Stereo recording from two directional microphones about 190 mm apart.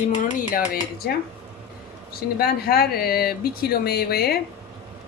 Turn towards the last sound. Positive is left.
turn(degrees=55)  # may be behind; listen again after turning